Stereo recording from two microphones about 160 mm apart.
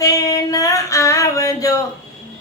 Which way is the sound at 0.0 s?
20° left (ahead or behind).